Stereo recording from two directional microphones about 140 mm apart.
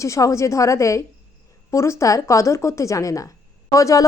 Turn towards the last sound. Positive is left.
turn(degrees=25)  # may be behind; listen again after turning